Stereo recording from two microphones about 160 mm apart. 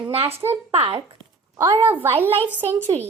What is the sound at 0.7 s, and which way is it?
Speech, 40° right (ahead or behind).